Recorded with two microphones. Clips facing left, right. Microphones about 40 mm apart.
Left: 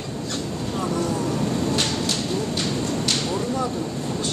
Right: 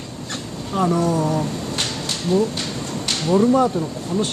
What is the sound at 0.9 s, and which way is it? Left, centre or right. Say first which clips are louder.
Speech: right 5 dB; right.